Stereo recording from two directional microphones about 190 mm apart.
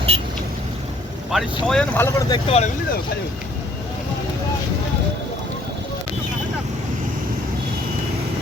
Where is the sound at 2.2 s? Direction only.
20° left (ahead or behind).